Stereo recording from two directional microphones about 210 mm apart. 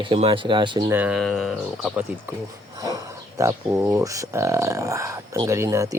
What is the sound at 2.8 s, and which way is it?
Speech, 15° right (ahead or behind).